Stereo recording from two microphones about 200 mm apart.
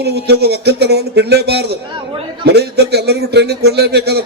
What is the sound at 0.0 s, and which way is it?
A man's voice, 55° right (ahead or behind).